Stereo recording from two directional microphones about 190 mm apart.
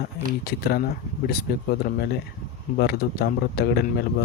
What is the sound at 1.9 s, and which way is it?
Speech, 45° left (ahead or behind).